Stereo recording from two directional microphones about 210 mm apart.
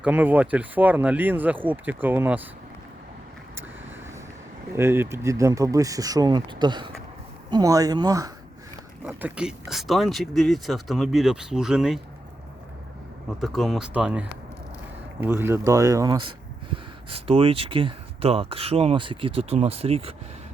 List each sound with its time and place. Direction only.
0.0 s speech: 10° right (ahead or behind)
4.7 s speech: 10° right (ahead or behind)
9.0 s speech: 5° right (ahead or behind)
13.4 s speech: centre (ahead or behind); by 20.1 s 30° right (ahead or behind)